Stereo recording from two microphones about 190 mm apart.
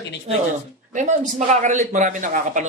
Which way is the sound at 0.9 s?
40° right (ahead or behind).